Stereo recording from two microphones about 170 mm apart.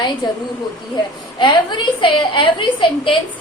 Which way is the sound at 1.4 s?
30° left (ahead or behind).